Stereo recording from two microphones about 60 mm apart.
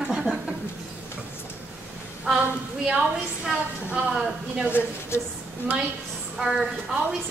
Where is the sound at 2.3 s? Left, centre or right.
Centre.